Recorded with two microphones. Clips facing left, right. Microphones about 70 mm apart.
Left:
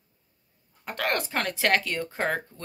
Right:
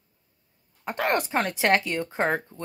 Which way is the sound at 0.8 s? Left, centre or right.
Right.